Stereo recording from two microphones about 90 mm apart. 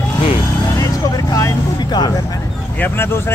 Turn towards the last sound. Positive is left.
turn(degrees=25)  # may be behind; listen again after turning